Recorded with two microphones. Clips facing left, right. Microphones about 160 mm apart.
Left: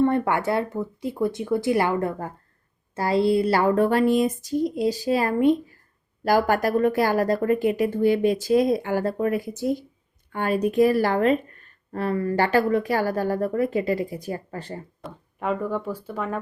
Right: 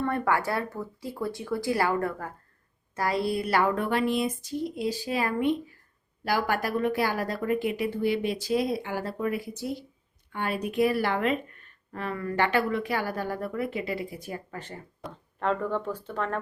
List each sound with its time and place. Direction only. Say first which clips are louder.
0.0 s a woman's voice: left 6 dB; 25° left (ahead or behind)
15.0 s speech: even; 10° left (ahead or behind)